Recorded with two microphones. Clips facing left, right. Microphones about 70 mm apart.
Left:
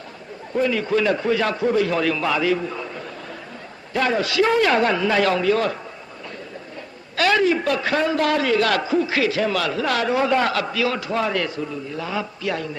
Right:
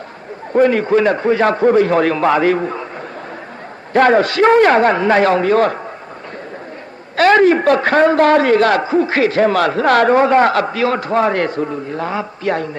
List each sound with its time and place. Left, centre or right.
0.5 s a man's voice: right
3.9 s a man's voice: right
7.2 s a man's voice: right